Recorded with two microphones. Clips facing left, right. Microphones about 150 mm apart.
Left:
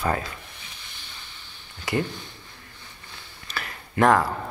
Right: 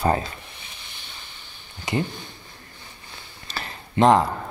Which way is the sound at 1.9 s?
20° right (ahead or behind).